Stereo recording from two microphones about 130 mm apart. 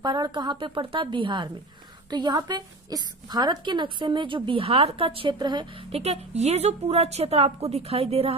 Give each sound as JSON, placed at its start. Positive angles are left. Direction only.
{"t": 0.0, "sound": "a woman's voice", "side_deg": -35}
{"t": 5.9, "sound": "a woman's voice", "side_deg": -55}